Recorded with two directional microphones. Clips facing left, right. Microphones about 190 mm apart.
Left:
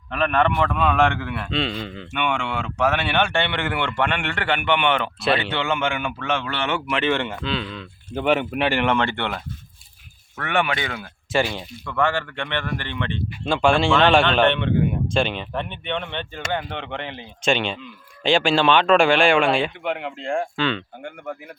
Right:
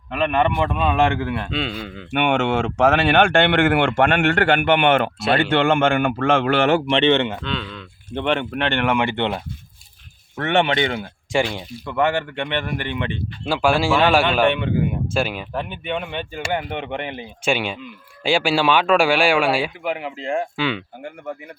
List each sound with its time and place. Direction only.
0.1 s speech: 15° right (ahead or behind)
1.5 s speech: 5° right (ahead or behind)
2.0 s speech: 65° right (ahead or behind)
2.8 s a man's voice: 50° right (ahead or behind)
6.9 s speech: 25° right (ahead or behind)
7.4 s speech: 5° left (ahead or behind)
8.9 s speech: 15° right (ahead or behind)